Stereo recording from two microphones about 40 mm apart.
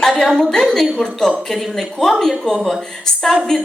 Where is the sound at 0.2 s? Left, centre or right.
Centre.